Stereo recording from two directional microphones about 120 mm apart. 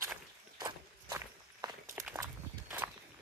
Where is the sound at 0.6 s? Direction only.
35° right (ahead or behind).